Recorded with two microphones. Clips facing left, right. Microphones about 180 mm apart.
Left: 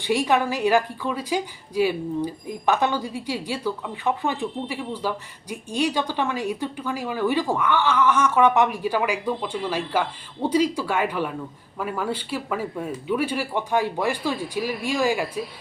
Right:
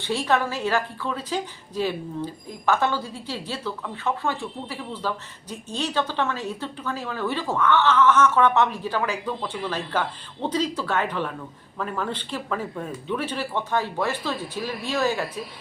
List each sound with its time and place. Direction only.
0.0 s a woman's voice: 15° left (ahead or behind)